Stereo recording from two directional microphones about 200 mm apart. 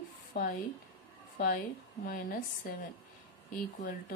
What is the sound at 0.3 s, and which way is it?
Speech, 50° left (ahead or behind).